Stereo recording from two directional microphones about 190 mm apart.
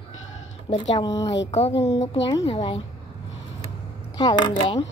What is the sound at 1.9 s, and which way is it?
Speech, 35° left (ahead or behind).